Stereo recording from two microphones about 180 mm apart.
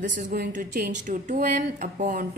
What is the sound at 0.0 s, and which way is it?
A woman's voice, 45° right (ahead or behind).